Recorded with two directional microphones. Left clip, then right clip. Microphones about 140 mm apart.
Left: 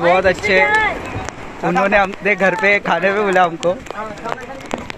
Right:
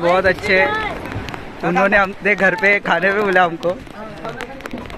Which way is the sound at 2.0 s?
20° right (ahead or behind).